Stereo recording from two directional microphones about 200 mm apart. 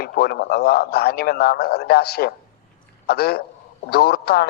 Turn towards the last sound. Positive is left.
turn(degrees=50)  # may be behind; listen again after turning